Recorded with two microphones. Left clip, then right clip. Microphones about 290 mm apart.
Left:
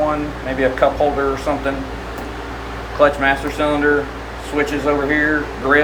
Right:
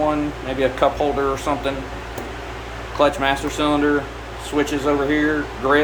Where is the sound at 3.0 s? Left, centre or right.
Centre.